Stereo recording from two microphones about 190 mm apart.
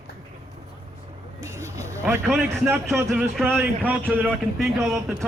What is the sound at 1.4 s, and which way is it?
Vehicle, 15° right (ahead or behind).